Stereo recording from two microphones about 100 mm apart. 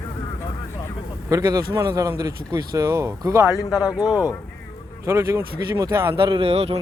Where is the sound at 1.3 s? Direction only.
35° right (ahead or behind).